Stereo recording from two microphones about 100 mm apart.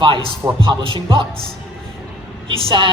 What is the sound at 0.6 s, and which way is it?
Speech, 50° right (ahead or behind).